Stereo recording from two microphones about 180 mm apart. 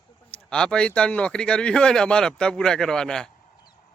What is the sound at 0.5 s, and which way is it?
Speech, 5° left (ahead or behind).